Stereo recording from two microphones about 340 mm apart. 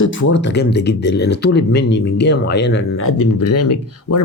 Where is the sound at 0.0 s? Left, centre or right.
Left.